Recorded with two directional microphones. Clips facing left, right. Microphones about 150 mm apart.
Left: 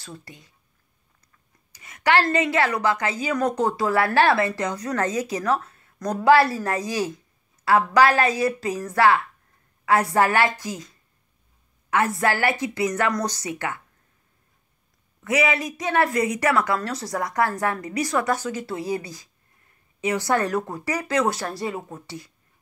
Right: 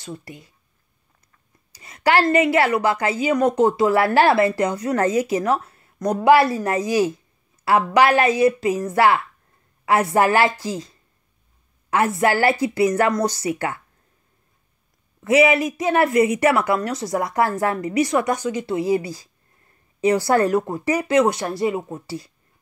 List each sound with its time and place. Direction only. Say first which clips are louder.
0.0 s speech: right 6 dB; 25° right (ahead or behind)
1.7 s a woman's voice: right 2 dB; 35° right (ahead or behind)
15.2 s a woman's voice: right 7 dB; 25° right (ahead or behind)